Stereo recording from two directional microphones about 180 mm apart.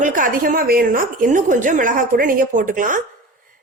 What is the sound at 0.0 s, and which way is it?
A woman's voice, 50° right (ahead or behind).